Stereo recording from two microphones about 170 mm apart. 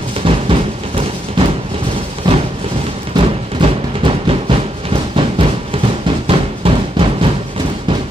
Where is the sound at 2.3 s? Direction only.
25° right (ahead or behind).